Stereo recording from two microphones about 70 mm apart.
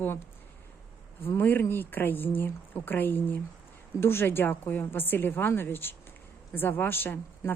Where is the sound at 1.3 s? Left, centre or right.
Left.